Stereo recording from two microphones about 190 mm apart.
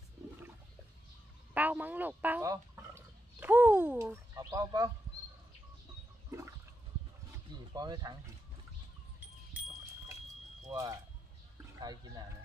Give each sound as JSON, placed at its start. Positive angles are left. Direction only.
{"t": 1.5, "sound": "speech", "side_deg": -10}
{"t": 7.7, "sound": "speech", "side_deg": -20}
{"t": 10.7, "sound": "speech", "side_deg": -20}